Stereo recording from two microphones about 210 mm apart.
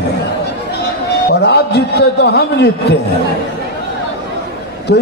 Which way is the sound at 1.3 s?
55° left (ahead or behind).